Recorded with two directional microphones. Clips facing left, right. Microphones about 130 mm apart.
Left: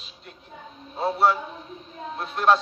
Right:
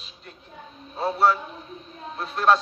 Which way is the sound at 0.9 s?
25° left (ahead or behind).